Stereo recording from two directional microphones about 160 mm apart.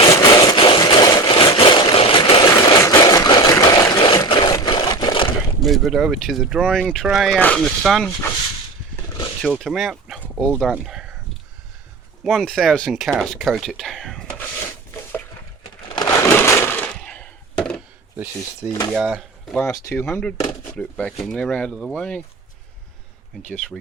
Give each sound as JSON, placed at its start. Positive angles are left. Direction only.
{"t": 0.1, "sound": "a sound", "side_deg": 25}
{"t": 5.6, "sound": "speech", "side_deg": 0}
{"t": 9.4, "sound": "speech", "side_deg": 0}
{"t": 10.2, "sound": "dog", "side_deg": 5}
{"t": 10.6, "sound": "speech", "side_deg": 0}
{"t": 12.2, "sound": "speech", "side_deg": 0}
{"t": 16.0, "sound": "a sound", "side_deg": 15}
{"t": 18.6, "sound": "speech", "side_deg": -15}
{"t": 18.9, "sound": "speech", "side_deg": -5}
{"t": 19.6, "sound": "speech", "side_deg": 15}
{"t": 23.4, "sound": "speech", "side_deg": 5}